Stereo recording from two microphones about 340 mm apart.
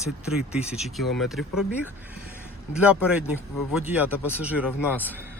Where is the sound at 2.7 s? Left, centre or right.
Centre.